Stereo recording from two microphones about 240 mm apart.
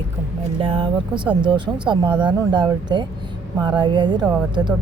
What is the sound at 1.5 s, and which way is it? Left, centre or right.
Speech, centre.